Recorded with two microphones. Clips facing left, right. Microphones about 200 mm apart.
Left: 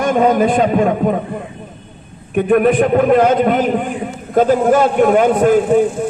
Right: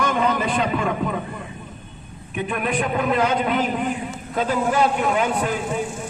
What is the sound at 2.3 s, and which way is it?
A man's voice, 50° left (ahead or behind).